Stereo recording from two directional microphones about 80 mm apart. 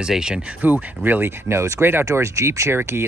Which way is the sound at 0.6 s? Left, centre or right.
Right.